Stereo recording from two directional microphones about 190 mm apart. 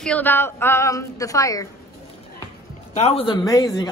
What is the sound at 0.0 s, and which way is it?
A woman's voice, 10° left (ahead or behind).